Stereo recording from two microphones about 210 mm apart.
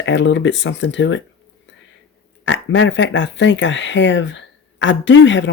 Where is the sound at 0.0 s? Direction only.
60° left (ahead or behind).